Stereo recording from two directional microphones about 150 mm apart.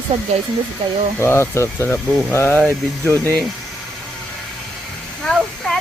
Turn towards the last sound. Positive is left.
turn(degrees=5)  # may be behind; listen again after turning